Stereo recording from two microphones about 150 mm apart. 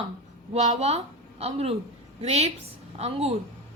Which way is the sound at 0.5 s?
45° right (ahead or behind).